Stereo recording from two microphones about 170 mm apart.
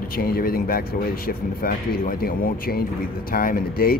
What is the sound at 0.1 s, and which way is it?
A man's voice, 60° left (ahead or behind).